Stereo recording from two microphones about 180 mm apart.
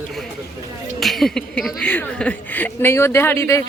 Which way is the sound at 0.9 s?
Centre (ahead or behind).